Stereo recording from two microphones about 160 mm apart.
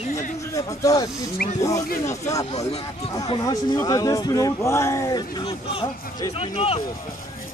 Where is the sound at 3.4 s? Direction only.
25° left (ahead or behind).